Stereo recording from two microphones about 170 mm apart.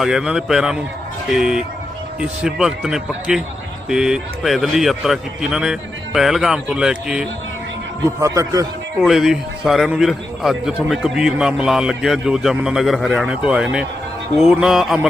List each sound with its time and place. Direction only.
0.0 s a man's voice: 5° right (ahead or behind)
8.2 s a man's voice: 20° right (ahead or behind)
9.0 s a man's voice: centre (ahead or behind)